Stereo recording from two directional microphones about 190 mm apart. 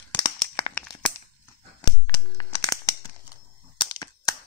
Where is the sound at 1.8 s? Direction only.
20° left (ahead or behind).